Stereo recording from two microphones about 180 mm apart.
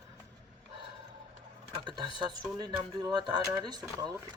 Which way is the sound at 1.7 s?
25° right (ahead or behind).